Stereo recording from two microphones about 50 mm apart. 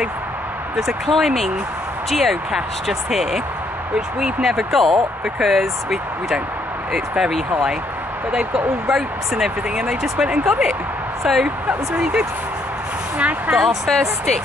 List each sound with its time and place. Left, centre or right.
0.7 s speech: centre
12.0 s speech: centre
13.6 s speech: centre